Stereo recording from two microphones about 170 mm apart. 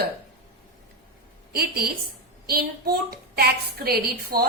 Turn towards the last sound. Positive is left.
turn(degrees=-65)  # may be behind; listen again after turning